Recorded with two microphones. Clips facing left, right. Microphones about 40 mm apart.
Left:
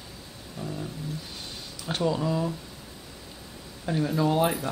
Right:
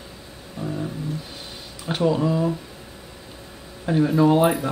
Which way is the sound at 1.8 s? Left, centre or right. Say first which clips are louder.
Right 6 dB; centre.